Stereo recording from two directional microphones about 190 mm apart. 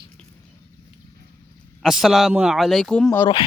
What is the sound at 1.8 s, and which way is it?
A man's voice, centre (ahead or behind).